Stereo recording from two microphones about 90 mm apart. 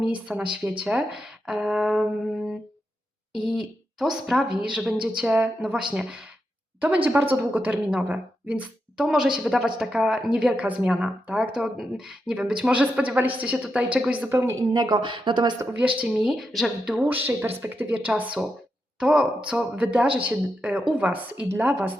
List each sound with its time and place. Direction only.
0.3 s a woman's voice: 10° right (ahead or behind)
3.4 s a woman's voice: 5° right (ahead or behind)
14.3 s speech: 30° right (ahead or behind)
14.7 s speech: 50° right (ahead or behind)
15.8 s a woman's voice: 15° right (ahead or behind)
16.9 s speech: 20° right (ahead or behind)
18.4 s a woman's voice: 5° right (ahead or behind)